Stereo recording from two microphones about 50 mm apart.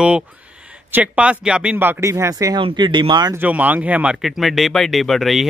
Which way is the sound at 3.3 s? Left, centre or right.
Right.